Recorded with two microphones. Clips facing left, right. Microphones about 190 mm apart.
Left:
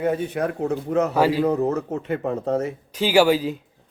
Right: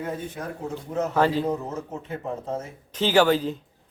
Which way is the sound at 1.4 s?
70° left (ahead or behind).